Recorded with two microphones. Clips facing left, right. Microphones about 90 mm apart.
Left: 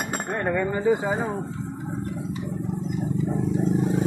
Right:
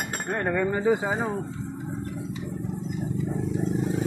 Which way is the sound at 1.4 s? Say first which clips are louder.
Left 2 dB; 15° left (ahead or behind).